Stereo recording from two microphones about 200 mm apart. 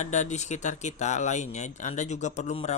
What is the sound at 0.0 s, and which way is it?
Speech, 35° left (ahead or behind).